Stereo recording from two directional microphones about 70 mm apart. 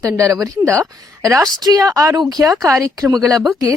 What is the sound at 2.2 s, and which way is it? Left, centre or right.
A woman's voice, right.